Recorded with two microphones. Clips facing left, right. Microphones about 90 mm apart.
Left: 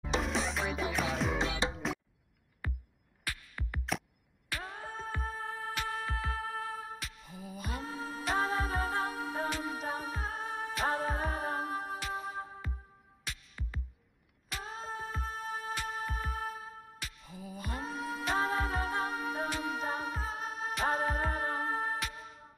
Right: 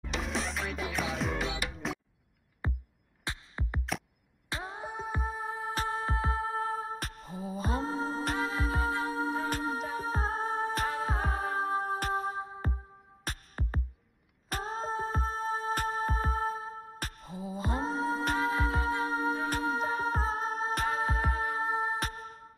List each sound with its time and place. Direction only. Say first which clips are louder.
0.2 s music: left 1 dB; centre (ahead or behind)
1.6 s music: left 4 dB; 25° left (ahead or behind)
2.6 s music: right 5 dB; 25° right (ahead or behind)
8.4 s music: even; 35° left (ahead or behind)
9.1 s music: right 4 dB; 35° right (ahead or behind)
18.3 s music: left 3 dB; 35° left (ahead or behind)
18.6 s music: right 3 dB; 35° right (ahead or behind)
21.5 s music: right 3 dB; 20° right (ahead or behind)
22.0 s music: right 4 dB; 40° right (ahead or behind)